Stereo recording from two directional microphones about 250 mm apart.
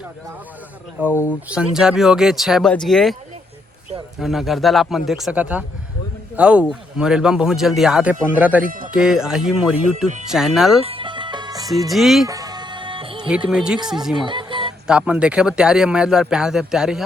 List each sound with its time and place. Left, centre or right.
1.1 s speech: centre
1.5 s speech: centre
4.2 s speech: centre
8.6 s speech: right
8.9 s speech: centre
10.8 s music: right
11.9 s speech: centre
12.3 s music: centre
13.5 s speech: centre
14.3 s a sound: centre
14.8 s speech: centre